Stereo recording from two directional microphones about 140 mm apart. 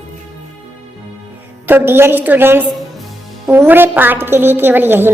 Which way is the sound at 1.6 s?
15° right (ahead or behind).